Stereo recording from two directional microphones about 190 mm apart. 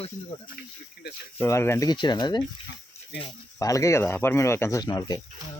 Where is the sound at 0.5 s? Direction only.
60° left (ahead or behind).